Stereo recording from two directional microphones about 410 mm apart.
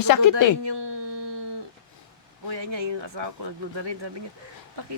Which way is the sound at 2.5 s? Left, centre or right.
Right.